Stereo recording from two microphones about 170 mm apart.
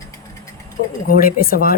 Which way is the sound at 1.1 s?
60° left (ahead or behind).